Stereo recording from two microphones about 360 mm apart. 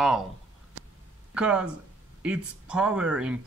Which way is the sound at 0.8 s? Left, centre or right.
Right.